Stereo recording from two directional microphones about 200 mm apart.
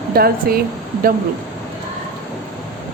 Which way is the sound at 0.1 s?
50° right (ahead or behind).